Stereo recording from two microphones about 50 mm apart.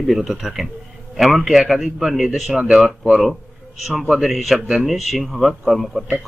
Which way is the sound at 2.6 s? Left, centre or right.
Right.